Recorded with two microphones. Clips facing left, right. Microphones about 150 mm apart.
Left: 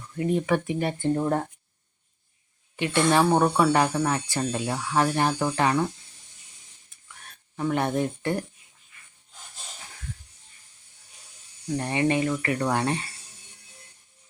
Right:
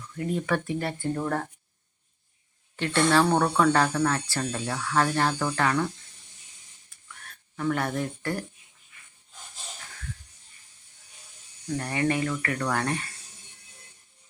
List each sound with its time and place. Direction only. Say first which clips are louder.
0.1 s speech: left 4 dB; 20° left (ahead or behind)
2.7 s speech: left 1 dB; 15° left (ahead or behind)
7.3 s speech: left 1 dB; 20° left (ahead or behind)
11.8 s speech: left 3 dB; 20° left (ahead or behind)